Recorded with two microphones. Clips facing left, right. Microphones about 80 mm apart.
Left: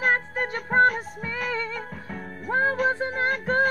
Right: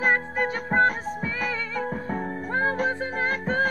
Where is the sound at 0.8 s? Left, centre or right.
Right.